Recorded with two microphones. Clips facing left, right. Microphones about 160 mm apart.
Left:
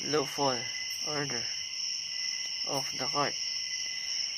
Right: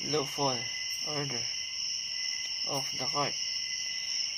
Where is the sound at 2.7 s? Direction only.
20° right (ahead or behind).